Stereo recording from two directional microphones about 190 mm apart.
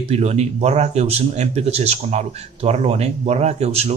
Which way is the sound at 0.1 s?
35° right (ahead or behind).